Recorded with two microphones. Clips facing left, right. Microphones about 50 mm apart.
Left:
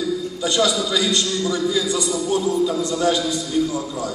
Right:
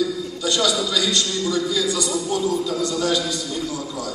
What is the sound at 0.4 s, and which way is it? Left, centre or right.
A man's voice, left.